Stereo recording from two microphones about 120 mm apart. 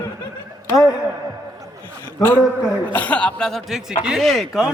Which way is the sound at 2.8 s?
10° left (ahead or behind).